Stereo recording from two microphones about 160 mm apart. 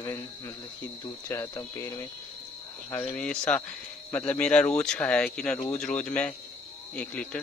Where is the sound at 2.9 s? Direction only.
10° left (ahead or behind).